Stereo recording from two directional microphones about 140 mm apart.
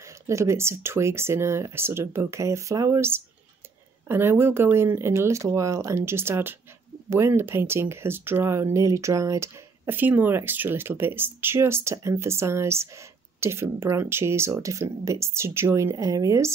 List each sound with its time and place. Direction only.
0.0 s speech: 20° right (ahead or behind)